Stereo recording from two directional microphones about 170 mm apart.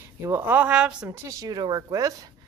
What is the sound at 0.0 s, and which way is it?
Speech, 15° right (ahead or behind).